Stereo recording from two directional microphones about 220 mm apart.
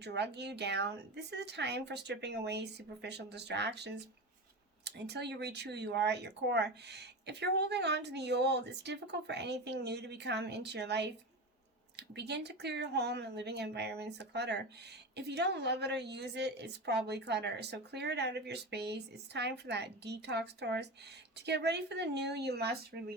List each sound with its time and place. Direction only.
0.0 s speech: 50° right (ahead or behind)